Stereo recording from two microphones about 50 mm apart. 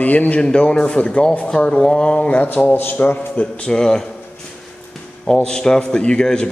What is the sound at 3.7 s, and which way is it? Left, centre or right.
Speech, centre.